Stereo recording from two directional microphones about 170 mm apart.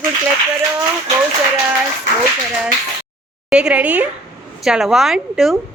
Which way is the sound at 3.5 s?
5° right (ahead or behind).